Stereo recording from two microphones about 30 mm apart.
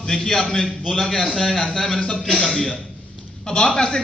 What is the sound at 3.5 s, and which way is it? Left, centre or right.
Speech, left.